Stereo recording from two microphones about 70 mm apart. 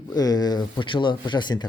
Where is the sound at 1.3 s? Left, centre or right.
Left.